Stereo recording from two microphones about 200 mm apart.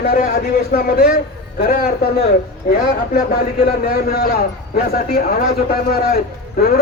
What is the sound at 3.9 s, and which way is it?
Speech, 50° left (ahead or behind).